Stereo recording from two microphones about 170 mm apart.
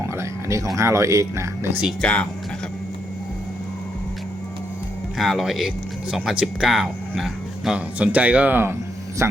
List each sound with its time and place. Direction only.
0.0 s a sound: 15° right (ahead or behind)
0.8 s speech: 15° right (ahead or behind)
2.0 s speech: 5° left (ahead or behind)
5.1 s speech: centre (ahead or behind)